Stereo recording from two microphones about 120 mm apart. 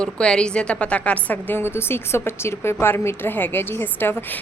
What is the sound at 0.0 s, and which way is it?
A woman's voice, 5° left (ahead or behind).